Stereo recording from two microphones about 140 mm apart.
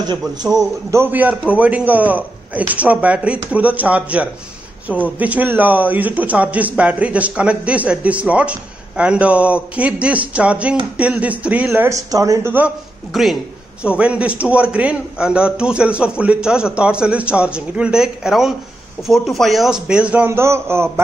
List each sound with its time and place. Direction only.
0.9 s a man's voice: 15° right (ahead or behind)
12.1 s speech: 25° right (ahead or behind)
12.5 s a man's voice: 5° right (ahead or behind)